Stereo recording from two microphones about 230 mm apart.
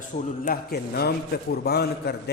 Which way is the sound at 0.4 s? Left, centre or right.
Left.